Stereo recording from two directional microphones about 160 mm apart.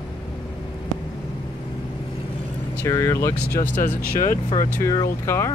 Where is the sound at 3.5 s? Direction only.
60° left (ahead or behind).